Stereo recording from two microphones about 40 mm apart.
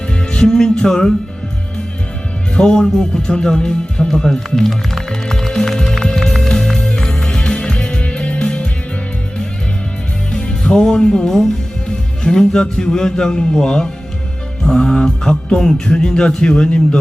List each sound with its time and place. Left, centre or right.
0.1 s music: left
2.6 s speech: centre
4.6 s music: centre; by 8.6 s left
10.5 s music: centre
11.9 s a man's voice: centre